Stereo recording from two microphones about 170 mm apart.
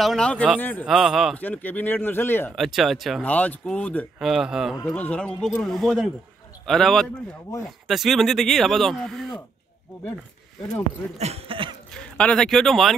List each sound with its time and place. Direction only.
0.0 s speech: 5° left (ahead or behind)
0.8 s speech: centre (ahead or behind)
1.4 s a man's voice: 10° left (ahead or behind)
2.5 s speech: centre (ahead or behind)
4.2 s speech: centre (ahead or behind)
4.8 s speech: 10° left (ahead or behind)
11.1 s speech: 40° right (ahead or behind)
11.9 s speech: 5° left (ahead or behind)